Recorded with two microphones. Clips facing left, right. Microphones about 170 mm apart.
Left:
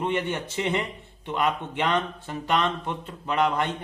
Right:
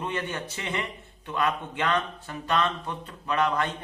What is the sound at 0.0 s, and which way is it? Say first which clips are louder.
Speech: left 5 dB; 20° left (ahead or behind).